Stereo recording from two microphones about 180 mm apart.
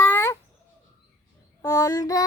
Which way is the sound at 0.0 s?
15° left (ahead or behind).